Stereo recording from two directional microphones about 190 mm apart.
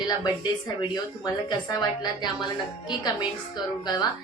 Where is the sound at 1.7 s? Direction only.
20° left (ahead or behind).